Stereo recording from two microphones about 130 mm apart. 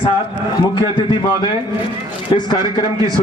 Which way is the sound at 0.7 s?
40° left (ahead or behind).